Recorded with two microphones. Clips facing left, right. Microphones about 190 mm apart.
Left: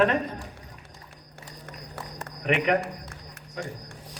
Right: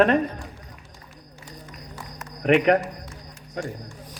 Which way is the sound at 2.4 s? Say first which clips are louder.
Right 6 dB; 45° right (ahead or behind).